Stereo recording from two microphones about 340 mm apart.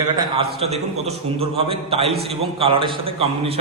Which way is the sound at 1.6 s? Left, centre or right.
Centre.